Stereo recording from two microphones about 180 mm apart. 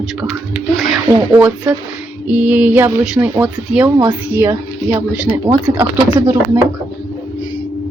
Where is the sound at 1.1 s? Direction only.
10° right (ahead or behind).